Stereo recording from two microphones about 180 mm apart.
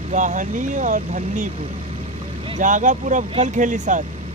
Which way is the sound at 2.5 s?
45° right (ahead or behind).